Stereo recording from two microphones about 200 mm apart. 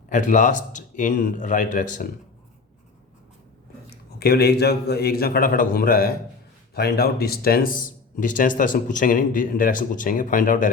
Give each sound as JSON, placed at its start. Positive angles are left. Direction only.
{"t": 0.1, "sound": "a man's voice", "side_deg": 40}
{"t": 3.8, "sound": "speech", "side_deg": 50}